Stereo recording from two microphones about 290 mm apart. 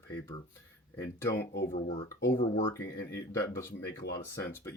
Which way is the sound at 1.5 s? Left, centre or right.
Left.